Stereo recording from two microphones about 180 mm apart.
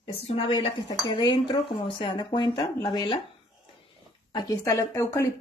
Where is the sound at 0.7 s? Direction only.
25° left (ahead or behind).